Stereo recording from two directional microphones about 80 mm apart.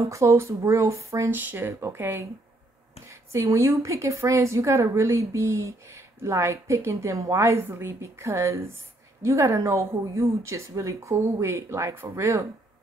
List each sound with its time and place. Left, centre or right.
0.0 s a woman's voice: right
1.3 s a woman's voice: right